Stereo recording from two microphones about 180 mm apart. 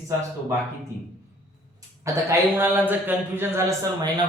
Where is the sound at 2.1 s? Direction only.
15° right (ahead or behind).